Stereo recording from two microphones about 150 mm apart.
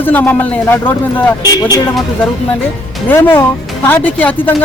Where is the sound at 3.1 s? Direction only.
15° left (ahead or behind).